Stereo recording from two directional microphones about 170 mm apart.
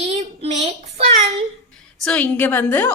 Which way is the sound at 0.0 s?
40° right (ahead or behind).